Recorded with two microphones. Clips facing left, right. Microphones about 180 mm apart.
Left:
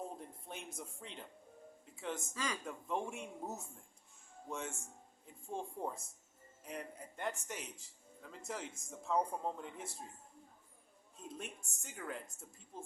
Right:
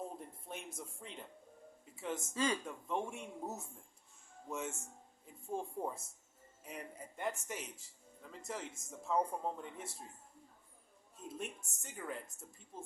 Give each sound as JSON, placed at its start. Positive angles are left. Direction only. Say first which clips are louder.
{"t": 0.0, "sound": "a sound", "louder": "even", "side_deg": 0}
{"t": 2.0, "sound": "a man's voice", "louder": "right 1 dB", "side_deg": 0}
{"t": 2.3, "sound": "speech", "louder": "right 10 dB", "side_deg": -25}
{"t": 2.6, "sound": "a man's voice", "louder": "even", "side_deg": 0}
{"t": 11.3, "sound": "a man's voice", "louder": "right 7 dB", "side_deg": 0}